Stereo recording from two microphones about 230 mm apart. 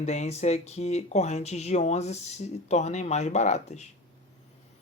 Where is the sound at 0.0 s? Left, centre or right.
Left.